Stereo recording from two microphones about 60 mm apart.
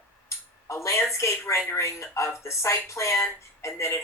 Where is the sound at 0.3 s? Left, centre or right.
Left.